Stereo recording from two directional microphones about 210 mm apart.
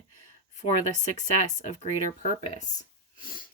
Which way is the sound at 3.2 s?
40° left (ahead or behind).